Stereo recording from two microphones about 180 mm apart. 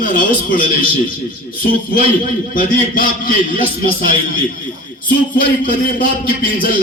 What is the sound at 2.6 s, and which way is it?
A man's voice, 50° left (ahead or behind).